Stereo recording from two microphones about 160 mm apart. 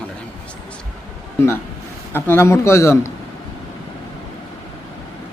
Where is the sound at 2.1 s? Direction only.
15° left (ahead or behind).